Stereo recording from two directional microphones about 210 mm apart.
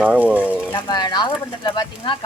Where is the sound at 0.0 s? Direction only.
5° right (ahead or behind).